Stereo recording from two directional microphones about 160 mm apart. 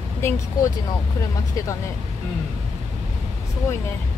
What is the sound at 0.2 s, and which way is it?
Speech, 15° left (ahead or behind).